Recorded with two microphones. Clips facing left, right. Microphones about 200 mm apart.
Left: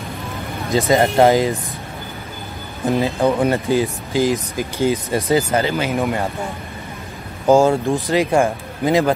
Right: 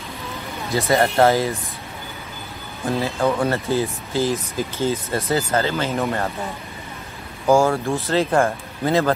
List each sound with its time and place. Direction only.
0.7 s speech: 15° left (ahead or behind)
2.9 s speech: 15° left (ahead or behind)
7.4 s speech: 20° left (ahead or behind)